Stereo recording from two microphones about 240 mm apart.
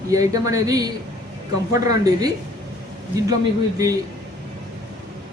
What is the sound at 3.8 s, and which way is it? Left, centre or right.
Speech, centre.